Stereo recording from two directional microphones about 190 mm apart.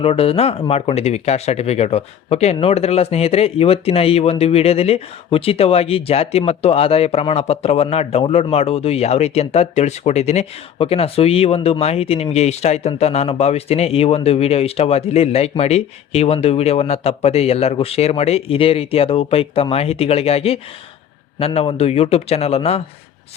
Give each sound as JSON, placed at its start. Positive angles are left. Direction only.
{"t": 0.0, "sound": "speech", "side_deg": 30}